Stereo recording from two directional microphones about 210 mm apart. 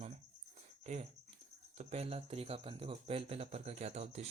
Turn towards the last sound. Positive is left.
turn(degrees=-30)  # may be behind; listen again after turning